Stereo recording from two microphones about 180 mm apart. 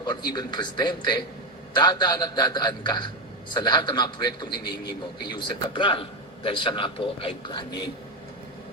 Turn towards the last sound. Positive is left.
turn(degrees=25)  # may be behind; listen again after turning